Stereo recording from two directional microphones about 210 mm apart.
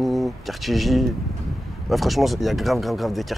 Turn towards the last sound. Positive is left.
turn(degrees=0)  # may be behind; listen again after turning